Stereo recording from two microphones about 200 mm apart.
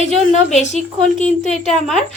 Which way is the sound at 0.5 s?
35° left (ahead or behind).